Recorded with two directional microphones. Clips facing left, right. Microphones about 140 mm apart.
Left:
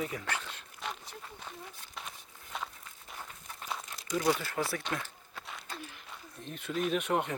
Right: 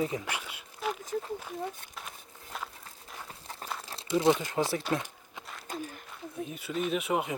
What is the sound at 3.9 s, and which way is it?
Speech, 30° right (ahead or behind).